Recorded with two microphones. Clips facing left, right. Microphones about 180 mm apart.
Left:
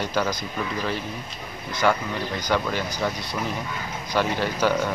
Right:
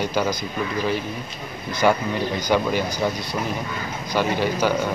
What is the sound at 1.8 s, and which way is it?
Speech, 15° right (ahead or behind).